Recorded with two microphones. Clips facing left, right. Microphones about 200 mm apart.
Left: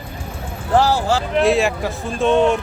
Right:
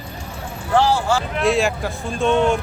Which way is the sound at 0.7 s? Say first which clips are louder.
Left 1 dB; 40° left (ahead or behind).